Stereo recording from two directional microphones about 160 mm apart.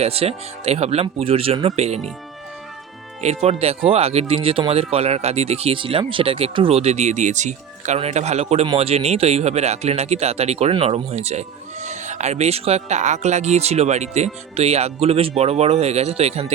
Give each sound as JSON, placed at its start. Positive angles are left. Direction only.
{"t": 0.0, "sound": "speech", "side_deg": -40}
{"t": 3.2, "sound": "speech", "side_deg": -40}